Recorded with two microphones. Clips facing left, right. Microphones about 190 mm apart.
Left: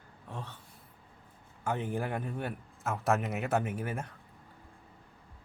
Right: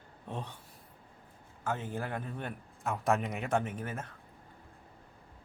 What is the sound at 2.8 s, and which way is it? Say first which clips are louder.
Speech: even; centre (ahead or behind).